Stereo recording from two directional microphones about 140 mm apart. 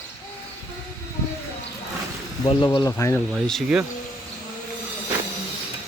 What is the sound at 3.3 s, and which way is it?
Speech, centre (ahead or behind).